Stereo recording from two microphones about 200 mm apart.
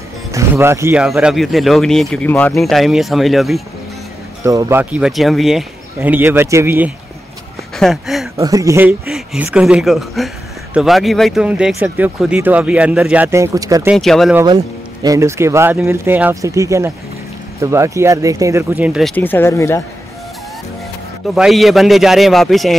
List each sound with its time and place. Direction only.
0.3 s speech: 15° right (ahead or behind)
4.5 s speech: 15° right (ahead or behind)
7.7 s speech: centre (ahead or behind)
8.4 s speech: 15° right (ahead or behind)
13.9 s speech: centre (ahead or behind)
14.3 s speech: 20° right (ahead or behind); by 19.1 s centre (ahead or behind)
19.1 s speech: 10° left (ahead or behind)
21.4 s speech: centre (ahead or behind)